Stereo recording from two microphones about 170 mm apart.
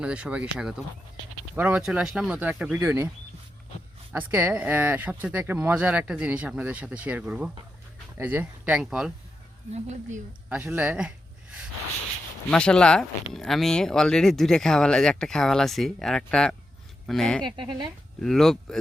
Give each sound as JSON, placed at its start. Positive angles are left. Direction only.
{"t": 0.0, "sound": "speech", "side_deg": -5}
{"t": 4.1, "sound": "speech", "side_deg": -10}
{"t": 9.7, "sound": "speech", "side_deg": -45}
{"t": 10.5, "sound": "speech", "side_deg": -10}
{"t": 12.5, "sound": "speech", "side_deg": 5}
{"t": 17.4, "sound": "speech", "side_deg": -30}
{"t": 18.2, "sound": "speech", "side_deg": 0}